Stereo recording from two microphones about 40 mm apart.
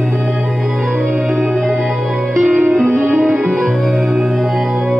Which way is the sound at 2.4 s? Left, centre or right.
Centre.